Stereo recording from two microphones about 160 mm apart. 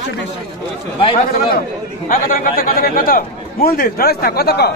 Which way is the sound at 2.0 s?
55° left (ahead or behind).